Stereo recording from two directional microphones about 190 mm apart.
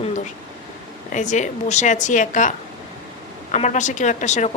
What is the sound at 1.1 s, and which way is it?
A woman's voice, 40° left (ahead or behind).